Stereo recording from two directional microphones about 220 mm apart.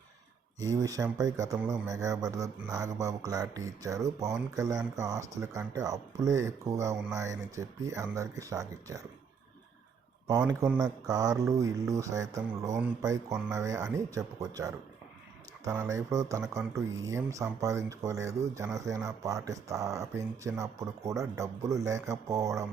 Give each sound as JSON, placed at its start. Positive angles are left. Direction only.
{"t": 0.6, "sound": "speech", "side_deg": -15}
{"t": 10.2, "sound": "speech", "side_deg": -15}